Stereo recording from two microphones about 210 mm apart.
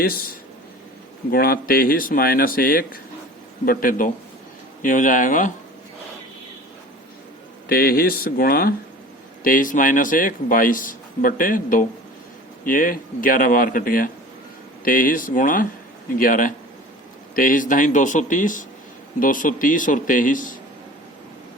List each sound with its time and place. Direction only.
0.0 s a man's voice: 45° left (ahead or behind)
7.7 s a man's voice: 45° left (ahead or behind)